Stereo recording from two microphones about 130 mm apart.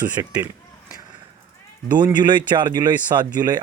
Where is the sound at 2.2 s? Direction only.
35° right (ahead or behind).